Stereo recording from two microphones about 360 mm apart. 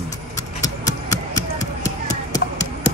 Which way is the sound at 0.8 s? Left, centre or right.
Centre.